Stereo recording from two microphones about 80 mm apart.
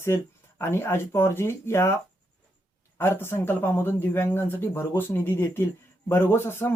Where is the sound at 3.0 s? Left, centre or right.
Left.